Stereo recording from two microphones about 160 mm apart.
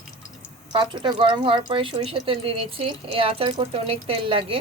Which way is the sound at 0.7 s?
30° right (ahead or behind).